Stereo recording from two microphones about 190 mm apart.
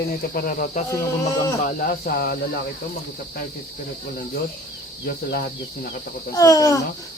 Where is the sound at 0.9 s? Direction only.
15° left (ahead or behind).